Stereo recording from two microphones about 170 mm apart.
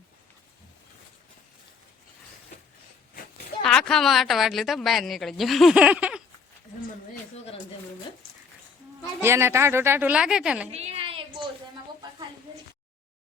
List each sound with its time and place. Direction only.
3.6 s a woman's voice: 5° left (ahead or behind)
9.2 s a woman's voice: 15° right (ahead or behind)
10.7 s a sound: 35° right (ahead or behind)